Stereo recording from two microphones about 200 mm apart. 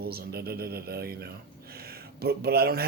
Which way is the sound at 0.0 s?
50° right (ahead or behind).